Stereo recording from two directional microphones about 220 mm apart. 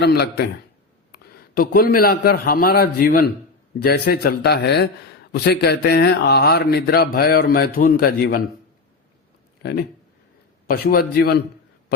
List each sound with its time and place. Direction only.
0.0 s a man's voice: 45° left (ahead or behind)
9.6 s speech: 45° left (ahead or behind)